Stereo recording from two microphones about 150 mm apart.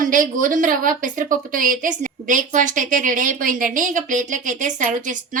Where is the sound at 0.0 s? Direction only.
65° right (ahead or behind).